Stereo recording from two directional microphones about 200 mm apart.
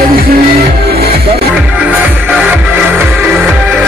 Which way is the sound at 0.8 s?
50° right (ahead or behind).